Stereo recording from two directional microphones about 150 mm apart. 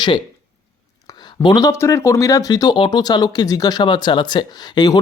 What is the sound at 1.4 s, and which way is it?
Speech, 30° left (ahead or behind).